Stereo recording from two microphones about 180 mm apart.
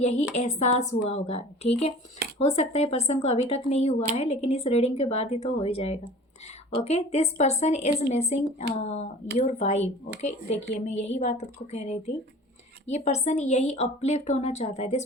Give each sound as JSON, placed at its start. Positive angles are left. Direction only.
{"t": 0.0, "sound": "a woman's voice", "side_deg": 40}